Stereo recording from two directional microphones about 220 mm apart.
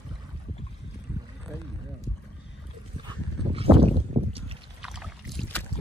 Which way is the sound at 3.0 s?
25° right (ahead or behind).